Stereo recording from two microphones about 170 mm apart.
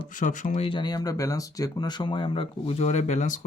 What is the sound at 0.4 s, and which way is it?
Speech, 35° left (ahead or behind).